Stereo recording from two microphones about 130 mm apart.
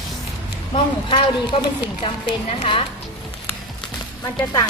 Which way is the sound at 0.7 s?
40° left (ahead or behind).